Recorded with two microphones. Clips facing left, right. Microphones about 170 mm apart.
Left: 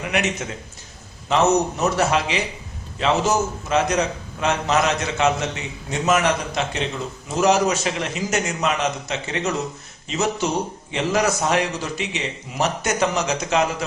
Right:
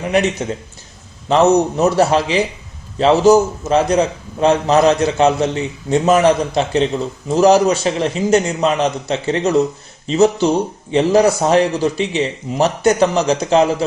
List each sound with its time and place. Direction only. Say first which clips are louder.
0.1 s a man's voice: right 8 dB; 35° right (ahead or behind)